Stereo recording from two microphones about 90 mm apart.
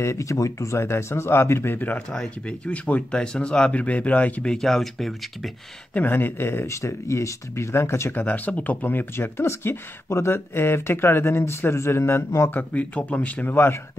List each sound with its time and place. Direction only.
0.0 s speech: 35° left (ahead or behind); by 5.5 s centre (ahead or behind)
5.9 s speech: 20° left (ahead or behind)